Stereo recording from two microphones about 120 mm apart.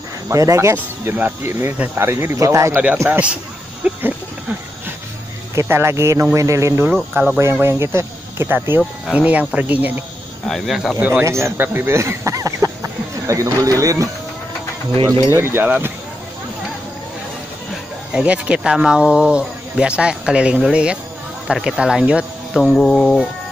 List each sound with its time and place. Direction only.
0.3 s speech: 25° right (ahead or behind)
3.0 s speech: 15° right (ahead or behind)
5.5 s speech: 25° right (ahead or behind)
10.4 s speech: centre (ahead or behind)
11.0 s speech: 15° right (ahead or behind)
11.2 s speech: 25° right (ahead or behind)
15.3 s speech: 20° right (ahead or behind)
18.1 s speech: 10° right (ahead or behind)
22.6 s speech: 5° left (ahead or behind)